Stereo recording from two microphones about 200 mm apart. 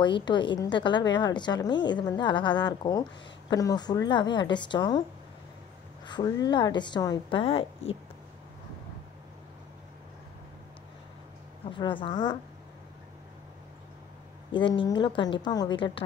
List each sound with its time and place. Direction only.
0.0 s a woman's voice: 20° left (ahead or behind)
6.0 s a woman's voice: 20° left (ahead or behind)
11.7 s a woman's voice: 25° left (ahead or behind)
14.5 s a woman's voice: 25° left (ahead or behind)